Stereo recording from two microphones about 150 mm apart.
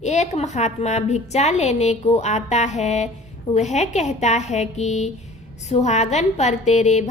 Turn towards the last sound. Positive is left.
turn(degrees=50)  # may be behind; listen again after turning